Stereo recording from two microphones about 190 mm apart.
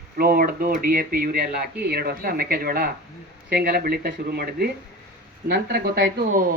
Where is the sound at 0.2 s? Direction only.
50° right (ahead or behind).